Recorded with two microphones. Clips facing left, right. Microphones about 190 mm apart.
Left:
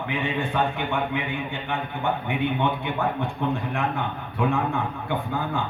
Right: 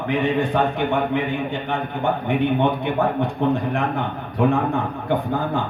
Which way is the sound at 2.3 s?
50° right (ahead or behind).